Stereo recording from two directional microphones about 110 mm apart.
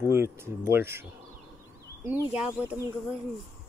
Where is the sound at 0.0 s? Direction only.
25° right (ahead or behind).